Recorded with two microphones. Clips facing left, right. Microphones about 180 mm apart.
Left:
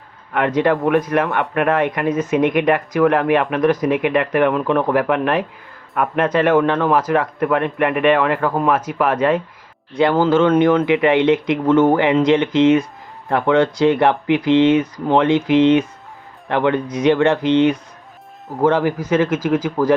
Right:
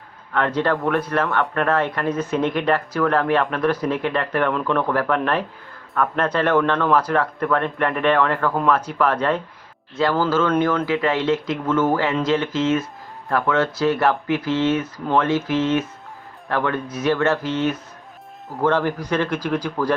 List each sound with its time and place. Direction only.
0.3 s speech: 15° left (ahead or behind)
10.0 s speech: 25° left (ahead or behind)
13.4 s speech: 25° left (ahead or behind); by 19.5 s 5° left (ahead or behind)